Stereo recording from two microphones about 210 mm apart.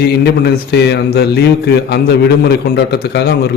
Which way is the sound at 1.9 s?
50° left (ahead or behind).